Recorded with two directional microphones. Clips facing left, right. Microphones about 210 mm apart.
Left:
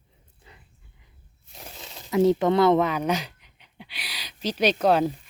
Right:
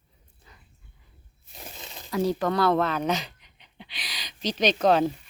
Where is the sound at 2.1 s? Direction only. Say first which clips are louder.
Left 6 dB; 20° left (ahead or behind).